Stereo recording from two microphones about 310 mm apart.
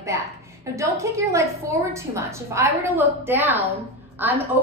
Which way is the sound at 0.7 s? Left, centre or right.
Centre.